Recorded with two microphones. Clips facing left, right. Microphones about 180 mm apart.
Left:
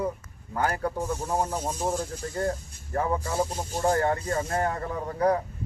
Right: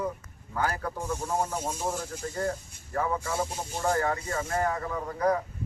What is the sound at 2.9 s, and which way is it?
Speech, 30° left (ahead or behind).